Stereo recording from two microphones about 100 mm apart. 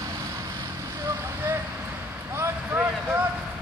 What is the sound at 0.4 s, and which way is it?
Vehicle, 35° right (ahead or behind).